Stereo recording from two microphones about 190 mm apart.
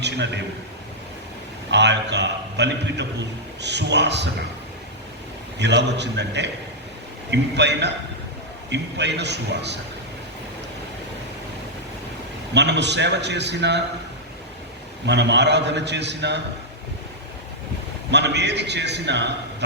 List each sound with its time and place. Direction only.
0.0 s a sound: 65° right (ahead or behind)
1.7 s a man's voice: 65° right (ahead or behind)
5.5 s a man's voice: 65° right (ahead or behind)
12.5 s a man's voice: 65° right (ahead or behind)
15.0 s a man's voice: 65° right (ahead or behind)
18.1 s a man's voice: 65° right (ahead or behind)